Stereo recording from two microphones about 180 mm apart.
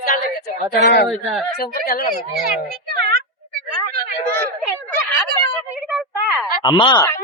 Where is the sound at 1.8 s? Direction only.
55° left (ahead or behind).